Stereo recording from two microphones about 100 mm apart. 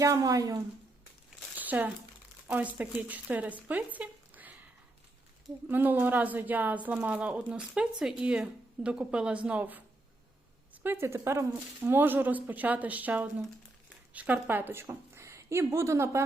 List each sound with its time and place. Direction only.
0.0 s a woman's voice: 35° right (ahead or behind)
1.6 s crumpling: 15° right (ahead or behind)
2.5 s speech: 15° right (ahead or behind)
5.6 s a woman's voice: 20° right (ahead or behind)
10.8 s a woman's voice: 25° right (ahead or behind)